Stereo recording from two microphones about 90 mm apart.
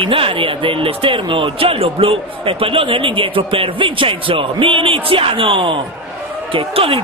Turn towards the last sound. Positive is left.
turn(degrees=-90)